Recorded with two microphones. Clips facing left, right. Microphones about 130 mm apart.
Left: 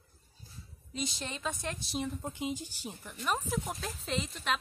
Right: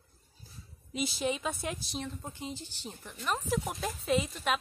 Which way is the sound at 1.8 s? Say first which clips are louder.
Left 3 dB; centre (ahead or behind).